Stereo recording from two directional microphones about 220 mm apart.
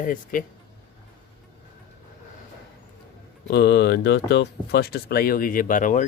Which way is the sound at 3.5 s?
50° left (ahead or behind).